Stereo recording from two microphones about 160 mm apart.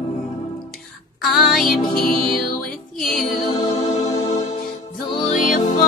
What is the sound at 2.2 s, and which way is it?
Music, 65° left (ahead or behind).